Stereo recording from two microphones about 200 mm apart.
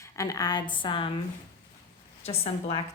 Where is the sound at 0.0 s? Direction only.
15° left (ahead or behind).